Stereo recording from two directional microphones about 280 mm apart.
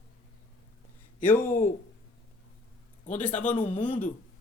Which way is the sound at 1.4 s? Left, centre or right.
Left.